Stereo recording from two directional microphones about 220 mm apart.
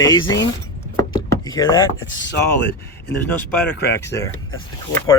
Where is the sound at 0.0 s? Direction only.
20° left (ahead or behind).